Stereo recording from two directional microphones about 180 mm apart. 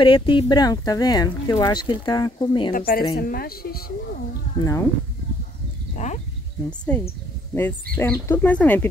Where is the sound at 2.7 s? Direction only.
55° left (ahead or behind).